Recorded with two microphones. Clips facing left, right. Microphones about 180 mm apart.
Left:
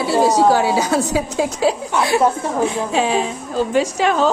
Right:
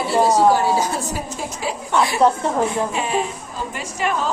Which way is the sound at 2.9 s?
90° left.